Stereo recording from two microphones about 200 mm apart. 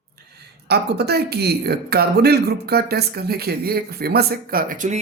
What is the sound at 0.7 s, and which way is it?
Speech, 55° right (ahead or behind).